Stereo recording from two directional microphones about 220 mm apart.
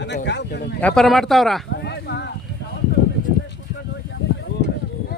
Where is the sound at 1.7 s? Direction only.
50° left (ahead or behind).